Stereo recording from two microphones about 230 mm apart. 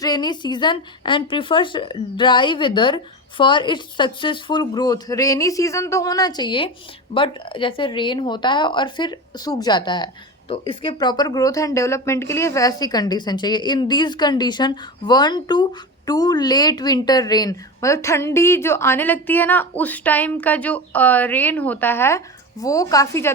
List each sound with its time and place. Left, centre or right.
0.0 s a woman's voice: centre